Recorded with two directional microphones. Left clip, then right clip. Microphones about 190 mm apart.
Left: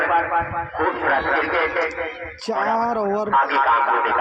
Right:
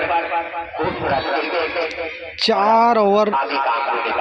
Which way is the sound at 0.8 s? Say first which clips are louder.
Left 1 dB; 40° right (ahead or behind).